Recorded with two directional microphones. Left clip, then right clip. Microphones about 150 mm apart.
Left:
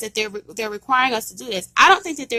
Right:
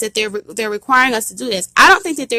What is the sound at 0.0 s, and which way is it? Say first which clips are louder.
A woman's voice: right 6 dB; 25° right (ahead or behind).